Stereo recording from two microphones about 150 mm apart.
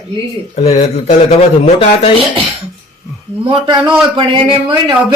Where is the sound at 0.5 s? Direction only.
45° left (ahead or behind).